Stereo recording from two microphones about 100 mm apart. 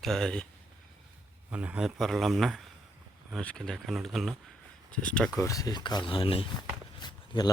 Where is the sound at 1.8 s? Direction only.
Centre (ahead or behind).